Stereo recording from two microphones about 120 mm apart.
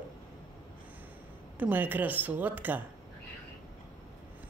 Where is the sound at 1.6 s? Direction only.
15° right (ahead or behind).